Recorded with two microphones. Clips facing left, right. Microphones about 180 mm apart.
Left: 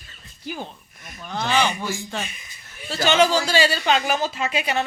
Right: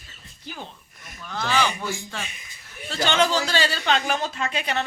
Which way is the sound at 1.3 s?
20° left (ahead or behind).